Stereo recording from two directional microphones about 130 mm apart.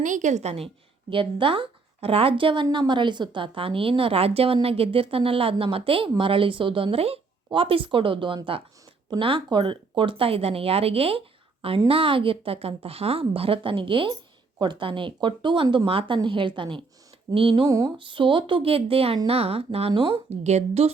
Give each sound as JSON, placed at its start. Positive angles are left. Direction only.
{"t": 0.0, "sound": "a woman's voice", "side_deg": -75}
{"t": 1.1, "sound": "a woman's voice", "side_deg": -40}
{"t": 17.5, "sound": "speech", "side_deg": -25}
{"t": 17.9, "sound": "a woman's voice", "side_deg": -40}
{"t": 19.9, "sound": "speech", "side_deg": -40}
{"t": 20.3, "sound": "a woman's voice", "side_deg": -60}